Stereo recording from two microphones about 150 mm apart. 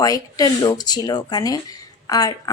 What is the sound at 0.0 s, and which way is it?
Speech, 25° left (ahead or behind).